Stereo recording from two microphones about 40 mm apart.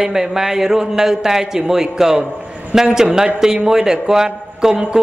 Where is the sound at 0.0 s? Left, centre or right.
Centre.